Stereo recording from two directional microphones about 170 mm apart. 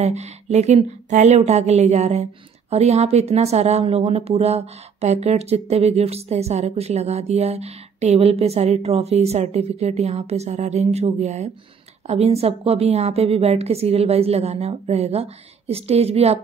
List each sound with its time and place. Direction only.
0.0 s speech: 40° right (ahead or behind)